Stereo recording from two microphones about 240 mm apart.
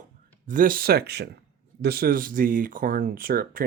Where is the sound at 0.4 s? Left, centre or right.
Right.